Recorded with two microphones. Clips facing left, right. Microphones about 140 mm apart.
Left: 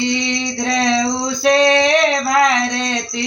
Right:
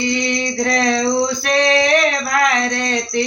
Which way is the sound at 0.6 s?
20° left (ahead or behind).